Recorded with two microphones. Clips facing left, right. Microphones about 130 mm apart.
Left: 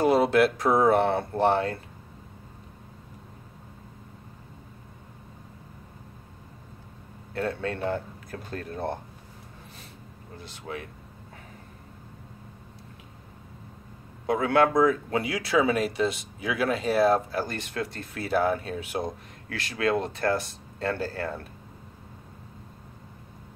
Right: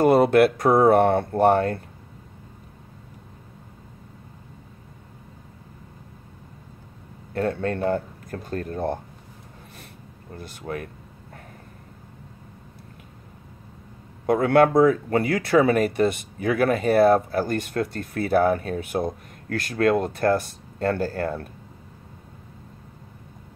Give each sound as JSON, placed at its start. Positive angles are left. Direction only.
{"t": 0.0, "sound": "speech", "side_deg": -55}
{"t": 7.3, "sound": "speech", "side_deg": -50}
{"t": 10.3, "sound": "speech", "side_deg": -55}
{"t": 14.2, "sound": "speech", "side_deg": -50}